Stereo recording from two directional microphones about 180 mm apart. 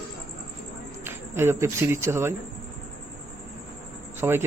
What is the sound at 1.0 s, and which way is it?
Speech, 15° right (ahead or behind).